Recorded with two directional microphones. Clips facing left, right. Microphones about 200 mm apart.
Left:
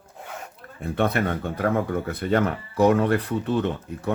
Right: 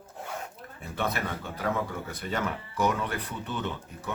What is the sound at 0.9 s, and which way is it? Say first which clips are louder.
Speech: left 8 dB; 55° left (ahead or behind).